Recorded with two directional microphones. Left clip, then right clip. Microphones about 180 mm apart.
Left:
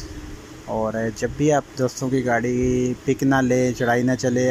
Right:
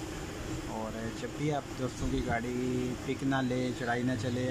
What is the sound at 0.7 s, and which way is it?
Speech, 45° left (ahead or behind).